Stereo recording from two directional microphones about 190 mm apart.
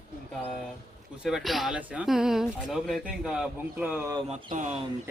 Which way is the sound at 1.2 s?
Centre (ahead or behind).